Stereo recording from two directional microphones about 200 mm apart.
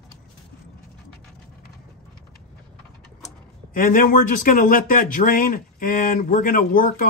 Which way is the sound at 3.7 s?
45° left (ahead or behind).